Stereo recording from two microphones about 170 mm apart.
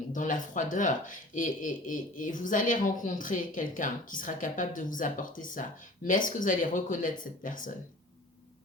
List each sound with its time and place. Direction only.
0.1 s speech: 50° left (ahead or behind)